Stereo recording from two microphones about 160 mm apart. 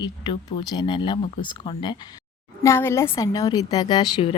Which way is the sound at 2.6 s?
15° left (ahead or behind).